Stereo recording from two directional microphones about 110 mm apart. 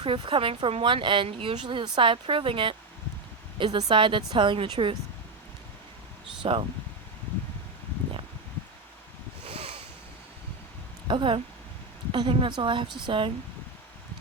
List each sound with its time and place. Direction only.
0.0 s speech: 50° right (ahead or behind)
6.4 s speech: 55° right (ahead or behind)
9.5 s a sound: 65° right (ahead or behind)
11.1 s speech: 50° right (ahead or behind)